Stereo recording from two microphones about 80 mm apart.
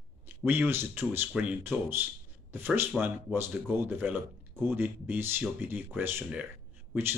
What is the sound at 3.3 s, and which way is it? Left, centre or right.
Speech, right.